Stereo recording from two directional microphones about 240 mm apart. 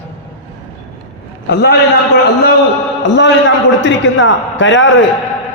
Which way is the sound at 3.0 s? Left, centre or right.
Left.